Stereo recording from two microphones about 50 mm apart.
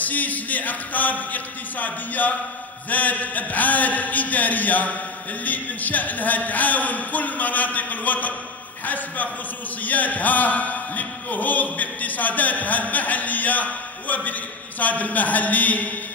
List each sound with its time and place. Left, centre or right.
0.0 s music: left